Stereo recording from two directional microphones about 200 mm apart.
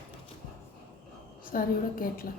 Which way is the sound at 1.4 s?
45° left (ahead or behind).